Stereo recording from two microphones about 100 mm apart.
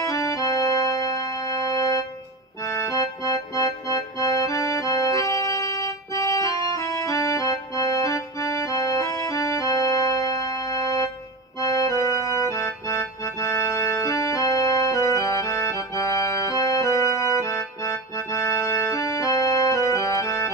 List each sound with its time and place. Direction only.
0.0 s organ: 35° left (ahead or behind)
2.6 s music: 30° left (ahead or behind)